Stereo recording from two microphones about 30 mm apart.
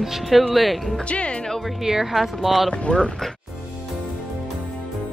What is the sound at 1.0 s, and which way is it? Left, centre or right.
Speech, left.